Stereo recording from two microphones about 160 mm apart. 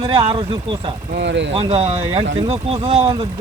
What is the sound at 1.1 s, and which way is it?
Speech, 90° right.